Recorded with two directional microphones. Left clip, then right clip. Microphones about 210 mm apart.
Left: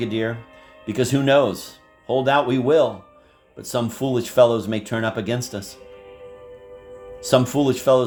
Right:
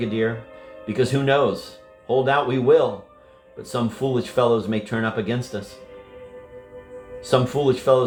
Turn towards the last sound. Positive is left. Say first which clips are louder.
# left 1 dB
turn(degrees=50)  # may be behind; listen again after turning